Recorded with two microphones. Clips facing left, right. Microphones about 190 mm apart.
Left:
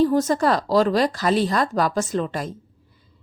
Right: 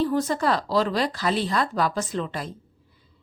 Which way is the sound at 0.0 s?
45° left (ahead or behind).